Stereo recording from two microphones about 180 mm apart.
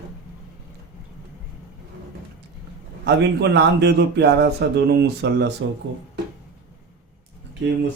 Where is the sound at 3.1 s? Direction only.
70° right (ahead or behind).